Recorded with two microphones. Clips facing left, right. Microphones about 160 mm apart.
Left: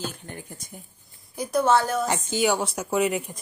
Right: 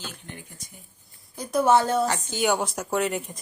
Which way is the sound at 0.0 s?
45° left (ahead or behind).